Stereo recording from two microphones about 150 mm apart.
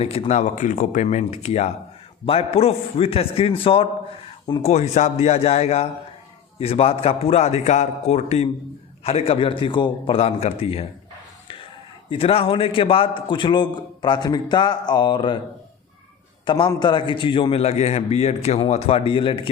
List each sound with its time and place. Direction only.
0.0 s a man's voice: 40° left (ahead or behind)
12.1 s a man's voice: 40° left (ahead or behind)
16.5 s a man's voice: 30° left (ahead or behind)